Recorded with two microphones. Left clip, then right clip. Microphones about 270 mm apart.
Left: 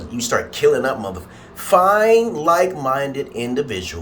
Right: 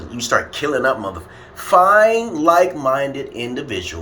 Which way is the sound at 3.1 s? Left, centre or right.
Left.